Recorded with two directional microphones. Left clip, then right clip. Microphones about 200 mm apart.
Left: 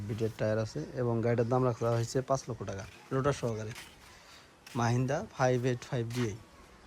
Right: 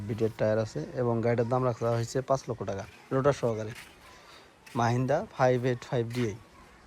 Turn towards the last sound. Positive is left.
turn(degrees=10)  # may be behind; listen again after turning